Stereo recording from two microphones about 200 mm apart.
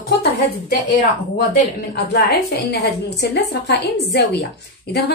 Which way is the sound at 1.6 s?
45° left (ahead or behind).